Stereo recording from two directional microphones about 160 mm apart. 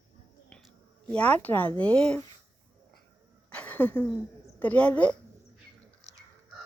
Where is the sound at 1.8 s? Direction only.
5° left (ahead or behind).